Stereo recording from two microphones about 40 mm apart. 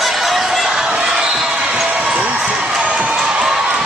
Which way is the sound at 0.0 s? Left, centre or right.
Centre.